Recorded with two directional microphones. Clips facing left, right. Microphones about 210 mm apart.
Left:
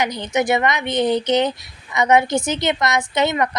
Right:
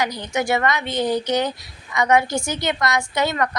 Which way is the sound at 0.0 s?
20° left (ahead or behind).